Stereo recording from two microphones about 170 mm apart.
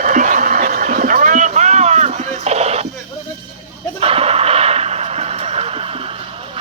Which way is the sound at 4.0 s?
35° right (ahead or behind).